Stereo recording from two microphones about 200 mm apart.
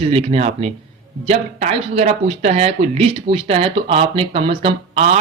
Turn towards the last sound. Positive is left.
turn(degrees=-30)  # may be behind; listen again after turning